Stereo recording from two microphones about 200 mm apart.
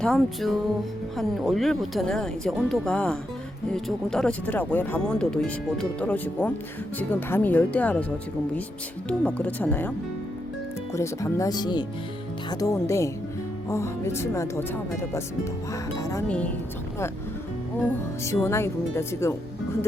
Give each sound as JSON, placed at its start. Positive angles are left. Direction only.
{"t": 0.0, "sound": "speech", "side_deg": 0}
{"t": 9.0, "sound": "speech", "side_deg": 5}
{"t": 10.9, "sound": "speech", "side_deg": 15}
{"t": 18.4, "sound": "speech", "side_deg": 15}